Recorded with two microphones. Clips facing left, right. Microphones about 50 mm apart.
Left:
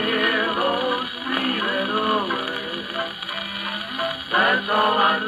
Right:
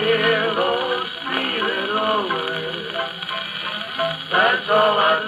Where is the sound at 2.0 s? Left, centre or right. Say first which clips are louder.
Right 3 dB; right.